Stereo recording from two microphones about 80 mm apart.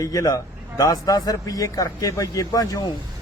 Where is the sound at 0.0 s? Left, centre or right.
Left.